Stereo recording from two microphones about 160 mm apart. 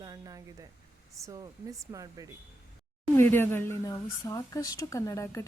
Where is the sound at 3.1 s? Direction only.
15° left (ahead or behind).